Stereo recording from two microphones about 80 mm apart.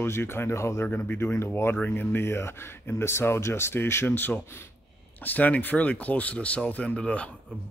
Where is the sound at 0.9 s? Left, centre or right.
Left.